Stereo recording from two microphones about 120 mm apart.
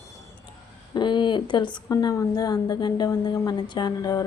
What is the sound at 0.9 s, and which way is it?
A woman's voice, 40° left (ahead or behind).